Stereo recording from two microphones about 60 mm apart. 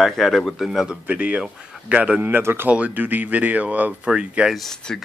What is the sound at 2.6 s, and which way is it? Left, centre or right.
Speech, right.